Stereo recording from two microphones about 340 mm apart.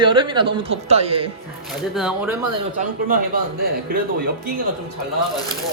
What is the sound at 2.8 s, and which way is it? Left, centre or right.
Speech, right.